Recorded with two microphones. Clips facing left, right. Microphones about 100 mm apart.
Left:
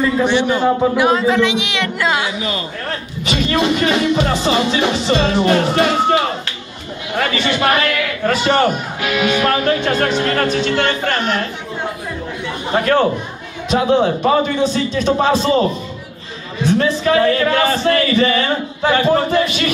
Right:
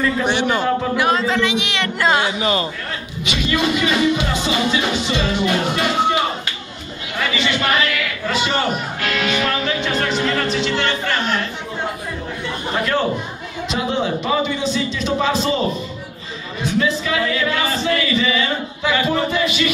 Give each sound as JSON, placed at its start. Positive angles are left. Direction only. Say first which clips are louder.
{"t": 0.9, "sound": "speech", "louder": "left 4 dB", "side_deg": 10}
{"t": 3.3, "sound": "speech", "louder": "left 3 dB", "side_deg": 45}
{"t": 7.2, "sound": "a man's voice", "louder": "left 3 dB", "side_deg": 45}
{"t": 9.0, "sound": "speech", "louder": "left 5 dB", "side_deg": 10}
{"t": 9.7, "sound": "speech", "louder": "left 5 dB", "side_deg": 50}
{"t": 12.7, "sound": "speech", "louder": "left 6 dB", "side_deg": 55}
{"t": 16.6, "sound": "speech", "louder": "left 5 dB", "side_deg": 50}